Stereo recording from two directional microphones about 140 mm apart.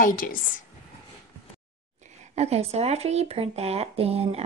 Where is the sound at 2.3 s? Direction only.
50° right (ahead or behind).